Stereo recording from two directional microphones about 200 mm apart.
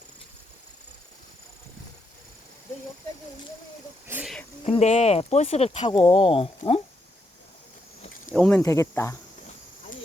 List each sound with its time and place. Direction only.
4.0 s speech: 5° right (ahead or behind)
4.6 s speech: 35° left (ahead or behind)
8.3 s speech: 10° left (ahead or behind)